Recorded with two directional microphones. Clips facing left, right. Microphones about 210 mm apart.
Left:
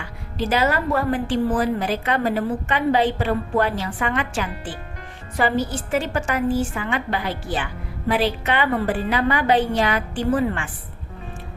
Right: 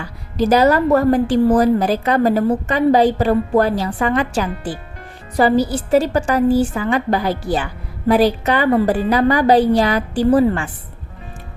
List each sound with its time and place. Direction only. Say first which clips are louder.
0.0 s a woman's voice: right 8 dB; 40° right (ahead or behind)